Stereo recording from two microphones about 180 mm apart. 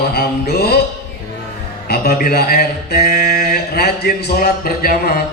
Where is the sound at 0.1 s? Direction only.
60° left (ahead or behind).